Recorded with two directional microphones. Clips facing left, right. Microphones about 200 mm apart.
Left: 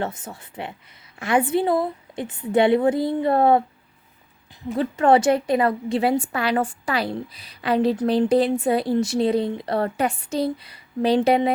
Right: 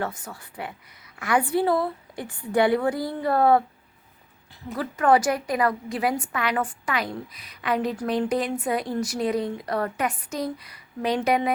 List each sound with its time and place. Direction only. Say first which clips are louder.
0.0 s a woman's voice: left 2 dB; 25° left (ahead or behind)
4.7 s a woman's voice: left 3 dB; 25° left (ahead or behind)